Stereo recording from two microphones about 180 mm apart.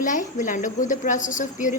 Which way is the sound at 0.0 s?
45° left (ahead or behind).